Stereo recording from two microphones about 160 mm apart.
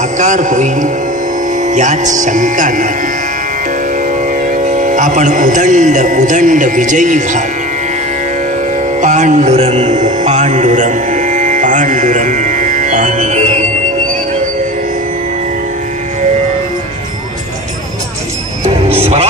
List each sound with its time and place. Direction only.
0.2 s speech: 50° right (ahead or behind)
4.3 s a man's voice: 50° right (ahead or behind)
9.0 s mantra: 50° right (ahead or behind)